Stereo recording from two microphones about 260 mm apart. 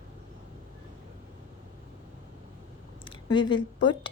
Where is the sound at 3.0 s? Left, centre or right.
Centre.